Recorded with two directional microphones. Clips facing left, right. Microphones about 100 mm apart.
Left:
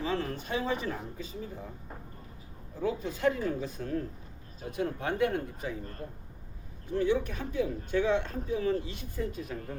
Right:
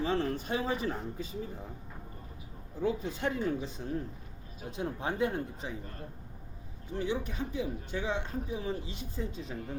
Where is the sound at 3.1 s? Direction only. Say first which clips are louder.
Left 3 dB; 30° right (ahead or behind).